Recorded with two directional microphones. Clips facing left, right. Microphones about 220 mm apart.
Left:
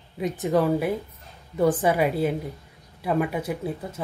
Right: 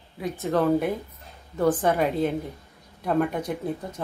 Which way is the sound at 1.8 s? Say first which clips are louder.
Left 1 dB; 10° left (ahead or behind).